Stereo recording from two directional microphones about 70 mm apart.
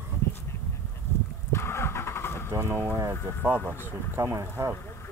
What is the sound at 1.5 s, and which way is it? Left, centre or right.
Vehicle, left.